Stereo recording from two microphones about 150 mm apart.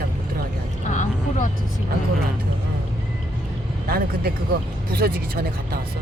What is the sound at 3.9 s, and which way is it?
Speech, 90° right.